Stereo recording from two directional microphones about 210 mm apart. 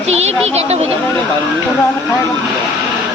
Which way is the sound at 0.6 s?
30° right (ahead or behind).